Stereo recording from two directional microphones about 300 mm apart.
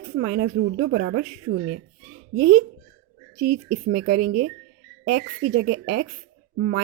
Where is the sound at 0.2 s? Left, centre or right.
Right.